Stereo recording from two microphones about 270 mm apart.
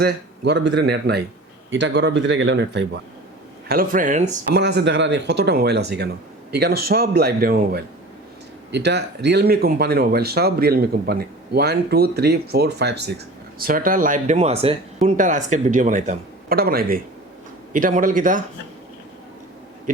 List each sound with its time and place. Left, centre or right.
0.0 s speech: right
4.6 s a man's voice: right